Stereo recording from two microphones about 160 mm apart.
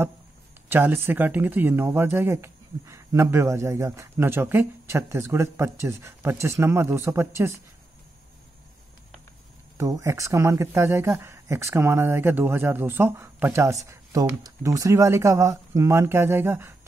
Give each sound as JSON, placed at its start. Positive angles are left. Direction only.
{"t": 0.7, "sound": "speech", "side_deg": -10}
{"t": 9.8, "sound": "speech", "side_deg": -20}